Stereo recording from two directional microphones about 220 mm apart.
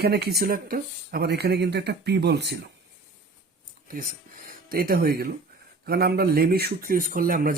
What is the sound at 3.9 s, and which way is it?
Speech, 35° right (ahead or behind).